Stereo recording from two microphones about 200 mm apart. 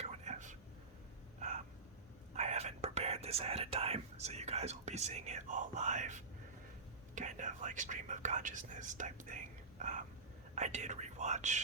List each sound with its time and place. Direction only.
0.0 s whispering: 35° right (ahead or behind)
2.3 s whispering: 35° right (ahead or behind)
7.2 s speech: 40° right (ahead or behind)